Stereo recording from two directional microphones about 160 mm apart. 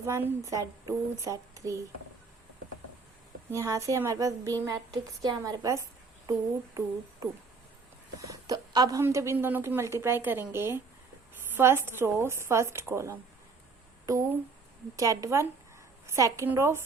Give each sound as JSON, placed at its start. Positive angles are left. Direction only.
{"t": 0.0, "sound": "speech", "side_deg": -15}
{"t": 3.5, "sound": "a woman's voice", "side_deg": -20}
{"t": 8.2, "sound": "a woman's voice", "side_deg": -25}